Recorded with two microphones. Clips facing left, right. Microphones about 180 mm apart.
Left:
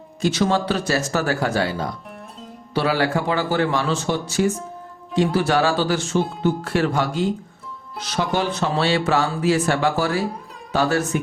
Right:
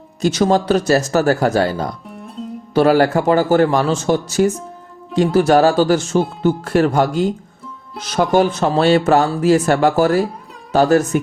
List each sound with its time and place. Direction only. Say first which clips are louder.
0.2 s speech: right 5 dB; 40° right (ahead or behind)
2.4 s music: right 11 dB; centre (ahead or behind)
2.7 s speech: right 8 dB; 45° right (ahead or behind)